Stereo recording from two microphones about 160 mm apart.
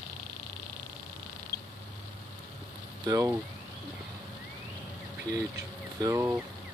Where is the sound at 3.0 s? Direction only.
20° right (ahead or behind).